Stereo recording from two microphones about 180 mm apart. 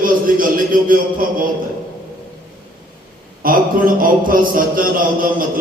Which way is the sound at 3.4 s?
50° right (ahead or behind).